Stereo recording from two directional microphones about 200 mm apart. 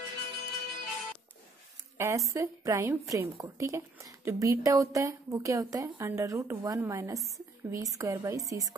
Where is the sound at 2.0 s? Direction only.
10° right (ahead or behind).